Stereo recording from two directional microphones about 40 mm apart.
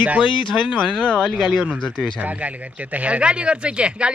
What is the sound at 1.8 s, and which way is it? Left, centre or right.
Speech, left.